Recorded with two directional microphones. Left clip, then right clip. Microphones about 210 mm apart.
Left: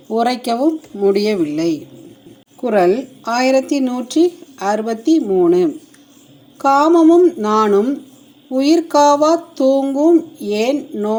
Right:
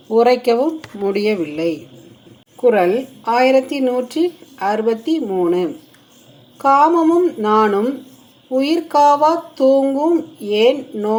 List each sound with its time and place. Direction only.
0.1 s speech: 25° left (ahead or behind)
6.6 s speech: 30° left (ahead or behind)